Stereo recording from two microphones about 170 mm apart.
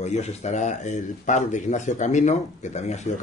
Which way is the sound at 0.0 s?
40° left (ahead or behind).